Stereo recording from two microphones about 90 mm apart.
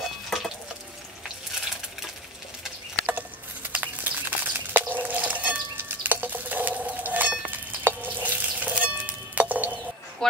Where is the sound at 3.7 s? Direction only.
20° right (ahead or behind).